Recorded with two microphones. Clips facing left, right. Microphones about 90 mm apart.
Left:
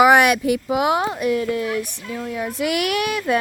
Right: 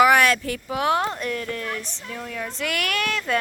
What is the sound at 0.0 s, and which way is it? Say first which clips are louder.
Speech: left 3 dB; 20° left (ahead or behind).